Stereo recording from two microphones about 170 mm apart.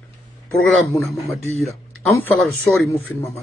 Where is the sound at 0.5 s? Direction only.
Centre (ahead or behind).